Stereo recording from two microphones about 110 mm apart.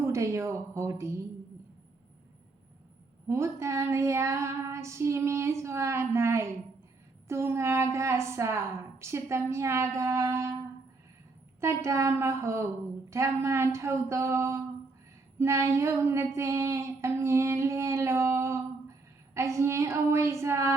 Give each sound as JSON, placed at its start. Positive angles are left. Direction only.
{"t": 0.0, "sound": "a woman's voice", "side_deg": -30}
{"t": 3.2, "sound": "a woman's voice", "side_deg": -25}
{"t": 11.6, "sound": "a woman's voice", "side_deg": -25}
{"t": 15.4, "sound": "a sound", "side_deg": -25}
{"t": 20.4, "sound": "a woman's voice", "side_deg": -25}